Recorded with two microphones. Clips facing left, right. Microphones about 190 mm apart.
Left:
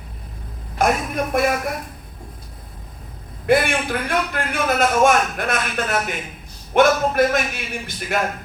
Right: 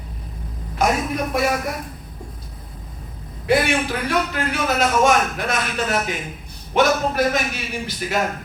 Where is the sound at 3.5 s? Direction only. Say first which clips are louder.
Left 1 dB; 55° left (ahead or behind).